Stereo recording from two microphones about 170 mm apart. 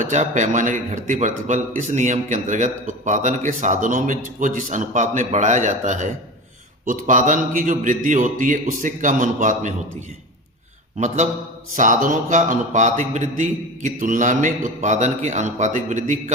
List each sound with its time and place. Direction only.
0.0 s a man's voice: 45° right (ahead or behind)
10.9 s a man's voice: 45° right (ahead or behind)